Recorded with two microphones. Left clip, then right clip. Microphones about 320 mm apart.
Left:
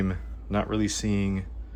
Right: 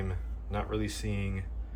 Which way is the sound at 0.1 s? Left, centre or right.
Left.